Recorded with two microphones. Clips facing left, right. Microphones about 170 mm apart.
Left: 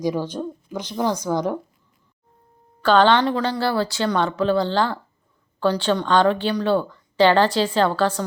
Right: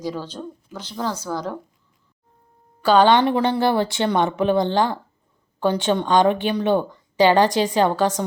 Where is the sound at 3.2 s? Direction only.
25° right (ahead or behind).